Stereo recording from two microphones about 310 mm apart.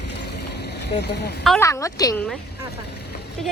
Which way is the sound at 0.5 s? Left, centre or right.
Left.